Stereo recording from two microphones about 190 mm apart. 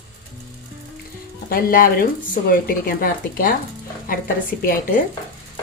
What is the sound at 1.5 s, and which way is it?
A woman's voice, 50° left (ahead or behind).